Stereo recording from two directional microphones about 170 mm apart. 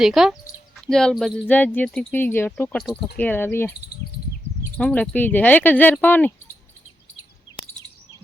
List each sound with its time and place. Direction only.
0.0 s speech: centre (ahead or behind); by 3.8 s 15° left (ahead or behind)
4.8 s speech: 5° left (ahead or behind)